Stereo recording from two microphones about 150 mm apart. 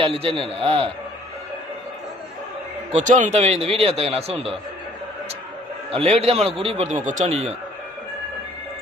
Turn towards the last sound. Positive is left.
turn(degrees=-45)  # may be behind; listen again after turning